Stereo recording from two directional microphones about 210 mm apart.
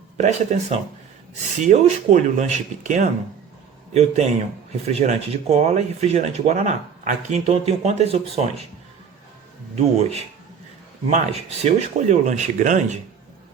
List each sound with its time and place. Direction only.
0.2 s speech: 30° right (ahead or behind)
9.7 s speech: 30° right (ahead or behind)